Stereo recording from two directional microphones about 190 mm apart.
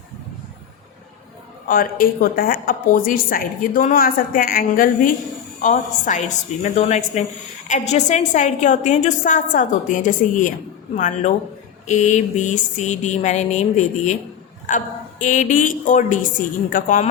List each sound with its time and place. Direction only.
1.6 s a woman's voice: 50° left (ahead or behind)